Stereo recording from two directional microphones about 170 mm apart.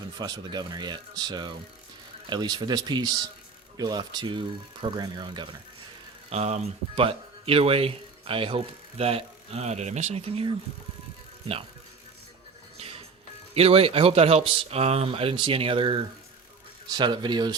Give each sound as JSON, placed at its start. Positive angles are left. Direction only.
{"t": 0.2, "sound": "speech", "side_deg": -25}
{"t": 6.3, "sound": "speech", "side_deg": -40}
{"t": 12.7, "sound": "music", "side_deg": -35}
{"t": 13.5, "sound": "speech", "side_deg": -35}